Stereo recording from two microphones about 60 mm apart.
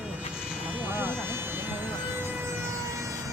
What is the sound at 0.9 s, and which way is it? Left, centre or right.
Vehicle, right.